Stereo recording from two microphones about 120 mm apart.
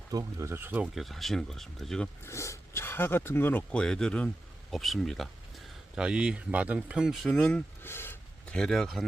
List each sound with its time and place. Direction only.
0.1 s speech: 30° right (ahead or behind)
0.9 s speech: centre (ahead or behind)
2.2 s speech: 25° left (ahead or behind); by 7.6 s 5° left (ahead or behind)
7.8 s a sound: 20° left (ahead or behind)
8.5 s speech: 5° left (ahead or behind)